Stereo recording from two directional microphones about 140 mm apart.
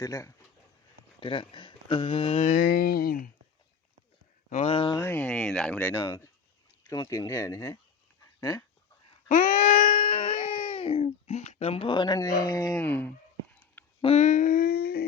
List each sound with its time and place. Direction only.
0.0 s speech: 25° left (ahead or behind)
1.2 s speech: 35° left (ahead or behind)
2.5 s speech: 85° left
4.4 s speech: 55° left (ahead or behind)
4.9 s speech: 15° left (ahead or behind)
9.3 s wail: 70° left (ahead or behind); by 12.8 s 25° left (ahead or behind)
12.8 s speech: 10° left (ahead or behind)
13.5 s a sound: 10° left (ahead or behind)
14.0 s a sound: 50° left (ahead or behind); by 15.0 s 90° left